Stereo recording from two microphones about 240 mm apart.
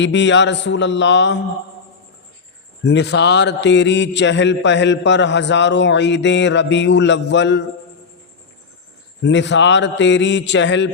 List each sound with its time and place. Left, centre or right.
0.0 s a man's voice: left
2.8 s a man's voice: left
9.2 s a man's voice: left